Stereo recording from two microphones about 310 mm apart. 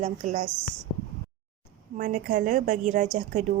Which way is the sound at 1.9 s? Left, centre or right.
Right.